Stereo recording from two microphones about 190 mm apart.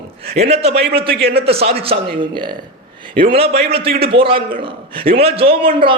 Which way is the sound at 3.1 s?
30° right (ahead or behind).